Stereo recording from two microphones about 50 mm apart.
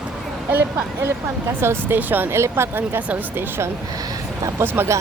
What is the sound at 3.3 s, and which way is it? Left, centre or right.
Speech, right.